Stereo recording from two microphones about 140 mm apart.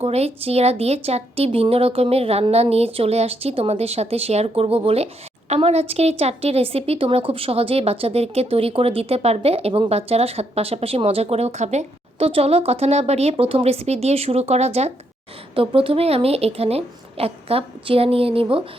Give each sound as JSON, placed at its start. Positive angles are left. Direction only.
{"t": 0.0, "sound": "a woman's voice", "side_deg": -45}